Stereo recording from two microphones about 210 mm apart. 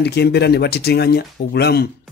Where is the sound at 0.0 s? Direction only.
50° left (ahead or behind).